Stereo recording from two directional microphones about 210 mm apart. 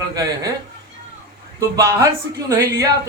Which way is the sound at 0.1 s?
15° right (ahead or behind).